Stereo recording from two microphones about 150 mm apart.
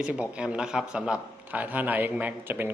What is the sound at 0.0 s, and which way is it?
Speech, 5° right (ahead or behind).